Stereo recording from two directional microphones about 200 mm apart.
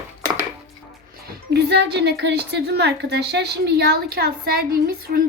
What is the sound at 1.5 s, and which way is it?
A woman's voice, 55° right (ahead or behind).